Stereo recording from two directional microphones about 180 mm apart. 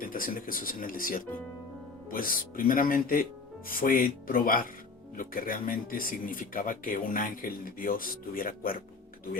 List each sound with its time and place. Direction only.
0.0 s speech: 50° left (ahead or behind)